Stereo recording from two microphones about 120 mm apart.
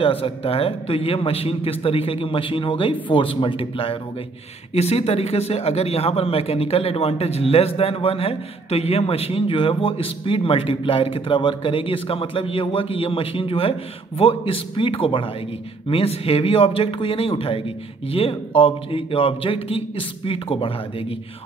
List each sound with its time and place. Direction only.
0.0 s speech: 50° left (ahead or behind)
4.7 s speech: 60° left (ahead or behind)